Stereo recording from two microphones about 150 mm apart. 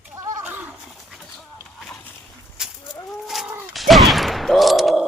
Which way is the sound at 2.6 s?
5° right (ahead or behind).